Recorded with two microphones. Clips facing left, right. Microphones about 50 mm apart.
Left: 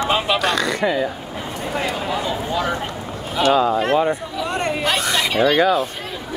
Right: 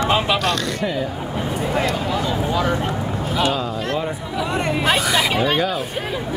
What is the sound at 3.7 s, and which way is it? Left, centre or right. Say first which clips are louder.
Speech: left 6 dB; left.